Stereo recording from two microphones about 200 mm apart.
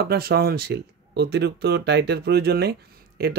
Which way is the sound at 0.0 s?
50° right (ahead or behind).